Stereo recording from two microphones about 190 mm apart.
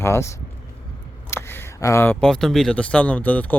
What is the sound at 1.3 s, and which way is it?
Speech, 10° left (ahead or behind).